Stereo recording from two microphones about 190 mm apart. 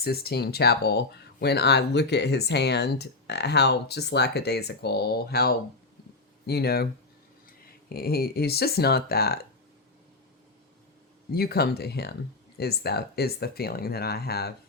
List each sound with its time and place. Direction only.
0.0 s speech: 55° left (ahead or behind)
7.9 s speech: 55° left (ahead or behind)
11.3 s speech: 55° left (ahead or behind)